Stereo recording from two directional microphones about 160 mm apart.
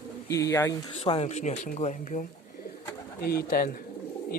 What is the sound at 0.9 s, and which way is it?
Speech, 40° left (ahead or behind).